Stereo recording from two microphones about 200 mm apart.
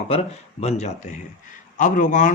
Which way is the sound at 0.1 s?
35° left (ahead or behind).